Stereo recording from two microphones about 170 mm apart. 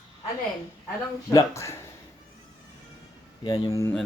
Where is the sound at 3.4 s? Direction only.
20° left (ahead or behind).